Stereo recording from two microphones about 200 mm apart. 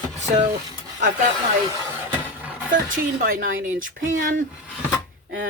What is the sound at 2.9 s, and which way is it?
Speech, 45° right (ahead or behind).